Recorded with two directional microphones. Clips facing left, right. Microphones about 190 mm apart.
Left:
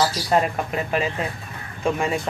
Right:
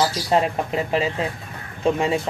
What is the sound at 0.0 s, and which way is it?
Speech, 25° right (ahead or behind).